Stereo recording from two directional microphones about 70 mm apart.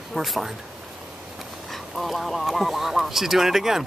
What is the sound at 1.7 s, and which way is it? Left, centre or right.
Speech, centre.